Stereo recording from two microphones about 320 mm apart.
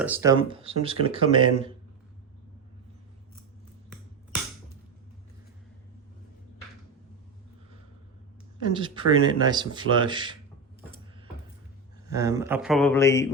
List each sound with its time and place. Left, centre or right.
0.0 s speech: centre
8.7 s speech: centre
12.0 s a man's voice: centre